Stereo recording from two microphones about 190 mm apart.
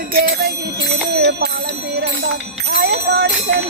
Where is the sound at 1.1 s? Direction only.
55° right (ahead or behind).